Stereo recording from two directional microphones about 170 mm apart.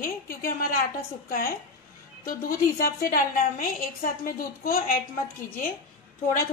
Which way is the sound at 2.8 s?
55° left (ahead or behind).